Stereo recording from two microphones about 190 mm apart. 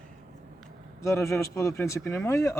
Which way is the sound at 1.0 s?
15° left (ahead or behind).